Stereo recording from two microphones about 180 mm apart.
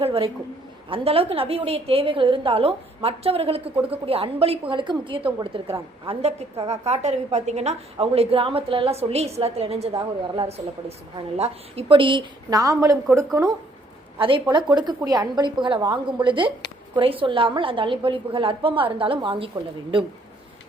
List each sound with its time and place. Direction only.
0.0 s a sound: 30° right (ahead or behind)
0.9 s a woman's voice: 30° right (ahead or behind)
9.9 s a woman's voice: 20° right (ahead or behind)
11.3 s a woman's voice: 35° right (ahead or behind); by 13.5 s 15° right (ahead or behind)
14.2 s a woman's voice: 30° right (ahead or behind)